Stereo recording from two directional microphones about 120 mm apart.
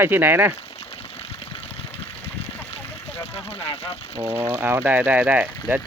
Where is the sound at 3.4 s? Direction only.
60° left (ahead or behind).